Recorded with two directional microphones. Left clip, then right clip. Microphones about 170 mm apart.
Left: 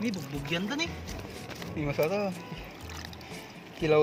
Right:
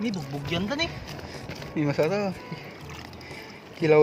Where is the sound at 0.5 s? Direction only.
55° right (ahead or behind).